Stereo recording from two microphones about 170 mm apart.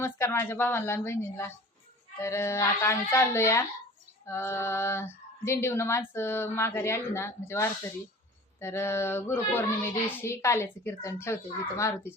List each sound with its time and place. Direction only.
0.0 s speech: 15° left (ahead or behind)